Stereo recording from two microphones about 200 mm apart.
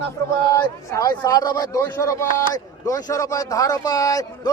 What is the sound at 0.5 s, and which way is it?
A man's voice, 15° left (ahead or behind).